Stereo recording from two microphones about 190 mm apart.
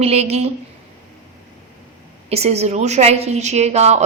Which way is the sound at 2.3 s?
35° right (ahead or behind).